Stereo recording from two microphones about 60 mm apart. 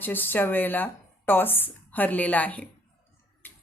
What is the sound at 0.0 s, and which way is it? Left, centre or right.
A woman's voice, left.